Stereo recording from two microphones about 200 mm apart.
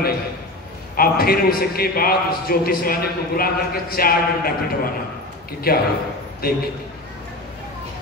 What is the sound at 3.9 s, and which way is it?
Speech, 50° left (ahead or behind).